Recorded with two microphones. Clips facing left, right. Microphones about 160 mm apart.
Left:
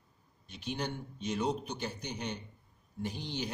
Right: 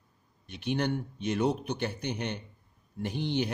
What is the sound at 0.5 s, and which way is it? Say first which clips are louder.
A man's voice: right 8 dB; 60° right (ahead or behind).